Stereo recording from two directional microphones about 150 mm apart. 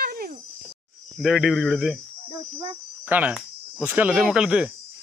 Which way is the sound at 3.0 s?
10° right (ahead or behind).